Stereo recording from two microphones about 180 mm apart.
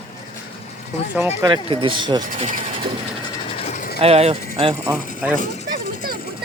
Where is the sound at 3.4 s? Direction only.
35° left (ahead or behind).